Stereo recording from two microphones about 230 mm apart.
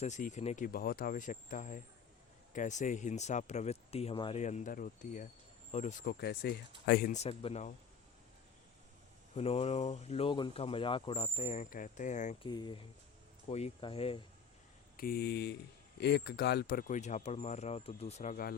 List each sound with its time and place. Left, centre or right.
0.0 s speech: left
9.3 s speech: left
12.5 s speech: centre
14.9 s speech: left